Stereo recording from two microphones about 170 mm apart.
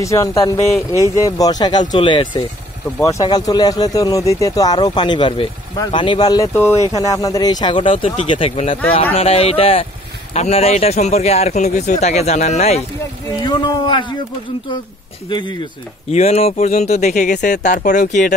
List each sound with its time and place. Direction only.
0.0 s speech: 20° left (ahead or behind)
3.0 s a man's voice: 20° left (ahead or behind); by 12.8 s 40° left (ahead or behind)
13.3 s speech: 25° left (ahead or behind)
15.2 s speech: 25° left (ahead or behind)
16.1 s a man's voice: 40° left (ahead or behind)